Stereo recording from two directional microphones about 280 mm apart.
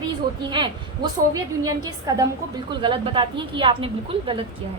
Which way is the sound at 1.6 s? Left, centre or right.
Centre.